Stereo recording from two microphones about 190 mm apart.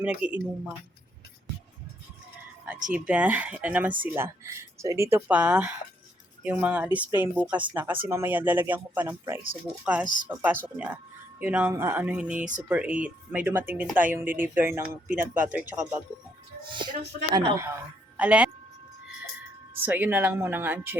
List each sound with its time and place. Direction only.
0.0 s speech: 10° right (ahead or behind)
2.9 s speech: 5° right (ahead or behind)
15.2 s speech: 45° right (ahead or behind)
15.5 s speech: 10° right (ahead or behind)
16.7 s speech: 25° right (ahead or behind)
18.2 s a woman's voice: 5° right (ahead or behind)
19.7 s speech: 10° right (ahead or behind)